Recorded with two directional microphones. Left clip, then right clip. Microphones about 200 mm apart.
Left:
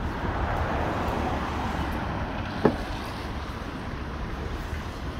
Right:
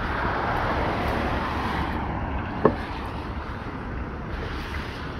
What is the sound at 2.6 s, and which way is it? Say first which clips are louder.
Vehicle: right 3 dB; 60° left (ahead or behind).